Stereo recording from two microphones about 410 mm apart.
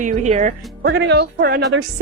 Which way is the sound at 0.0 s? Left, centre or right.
Centre.